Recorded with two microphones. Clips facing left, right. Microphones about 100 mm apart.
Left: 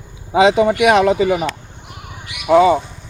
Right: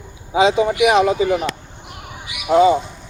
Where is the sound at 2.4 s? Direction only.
80° left.